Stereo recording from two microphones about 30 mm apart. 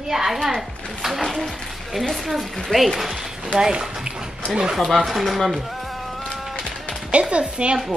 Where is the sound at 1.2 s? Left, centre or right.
Centre.